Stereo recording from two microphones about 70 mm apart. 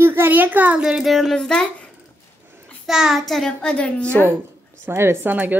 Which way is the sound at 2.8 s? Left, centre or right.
Centre.